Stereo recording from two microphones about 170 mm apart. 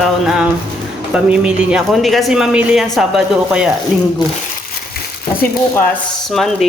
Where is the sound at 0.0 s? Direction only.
Centre (ahead or behind).